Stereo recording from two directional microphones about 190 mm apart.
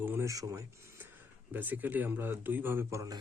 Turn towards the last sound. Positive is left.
turn(degrees=-15)  # may be behind; listen again after turning